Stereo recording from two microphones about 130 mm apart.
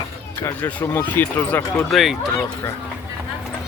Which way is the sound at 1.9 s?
Centre (ahead or behind).